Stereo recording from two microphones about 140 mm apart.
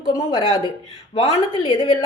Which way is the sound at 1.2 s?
40° left (ahead or behind).